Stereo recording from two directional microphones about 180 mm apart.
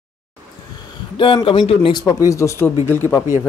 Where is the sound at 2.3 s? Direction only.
15° left (ahead or behind).